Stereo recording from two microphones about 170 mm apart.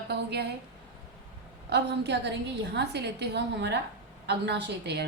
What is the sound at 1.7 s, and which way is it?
A woman's voice, 90° right.